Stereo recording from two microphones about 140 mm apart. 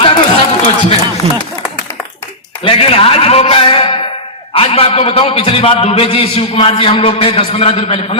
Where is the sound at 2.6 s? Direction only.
40° left (ahead or behind).